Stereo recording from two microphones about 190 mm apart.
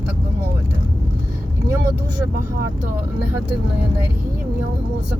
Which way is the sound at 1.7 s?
15° right (ahead or behind).